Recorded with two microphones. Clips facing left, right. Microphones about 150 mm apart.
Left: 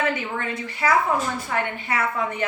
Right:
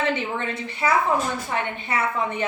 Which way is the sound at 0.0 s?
25° right (ahead or behind).